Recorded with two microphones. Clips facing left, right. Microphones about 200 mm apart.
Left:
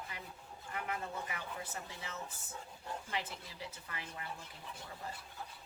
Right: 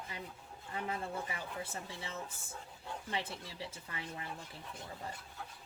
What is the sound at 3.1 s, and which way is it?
Speech, 30° right (ahead or behind).